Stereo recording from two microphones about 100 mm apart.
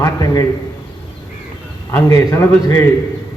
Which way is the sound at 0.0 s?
35° left (ahead or behind).